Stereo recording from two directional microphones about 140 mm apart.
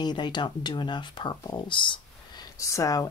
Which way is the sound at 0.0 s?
30° left (ahead or behind).